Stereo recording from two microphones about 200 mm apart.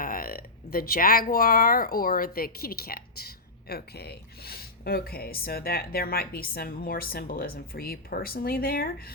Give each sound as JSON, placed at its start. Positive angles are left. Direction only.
{"t": 0.0, "sound": "speech", "side_deg": 45}